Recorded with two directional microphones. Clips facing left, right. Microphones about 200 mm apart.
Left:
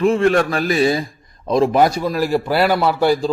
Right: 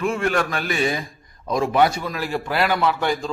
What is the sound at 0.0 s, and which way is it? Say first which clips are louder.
A man's voice: left 7 dB; 35° left (ahead or behind).